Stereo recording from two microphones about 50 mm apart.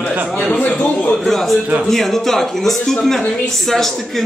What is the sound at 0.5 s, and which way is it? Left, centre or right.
Speech, left.